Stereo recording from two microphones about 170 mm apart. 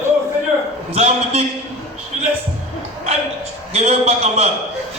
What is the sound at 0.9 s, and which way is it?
Speech, 40° right (ahead or behind).